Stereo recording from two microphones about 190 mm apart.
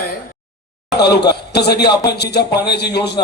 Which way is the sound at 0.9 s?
60° left (ahead or behind).